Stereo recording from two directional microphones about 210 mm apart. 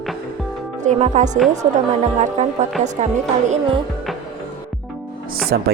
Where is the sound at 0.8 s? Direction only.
35° right (ahead or behind).